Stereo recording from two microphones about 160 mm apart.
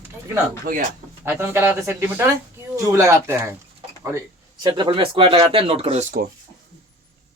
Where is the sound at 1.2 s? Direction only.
15° right (ahead or behind); by 6.0 s 40° right (ahead or behind).